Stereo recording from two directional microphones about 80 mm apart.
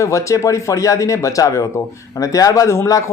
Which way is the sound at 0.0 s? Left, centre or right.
Left.